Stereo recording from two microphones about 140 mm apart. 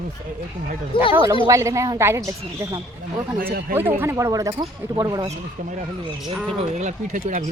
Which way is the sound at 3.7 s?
15° right (ahead or behind).